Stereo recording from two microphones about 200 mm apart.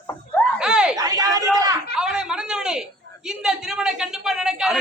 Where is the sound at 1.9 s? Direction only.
5° right (ahead or behind).